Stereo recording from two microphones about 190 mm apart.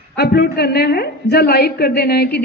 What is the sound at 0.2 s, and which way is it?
A woman's voice, 60° left (ahead or behind).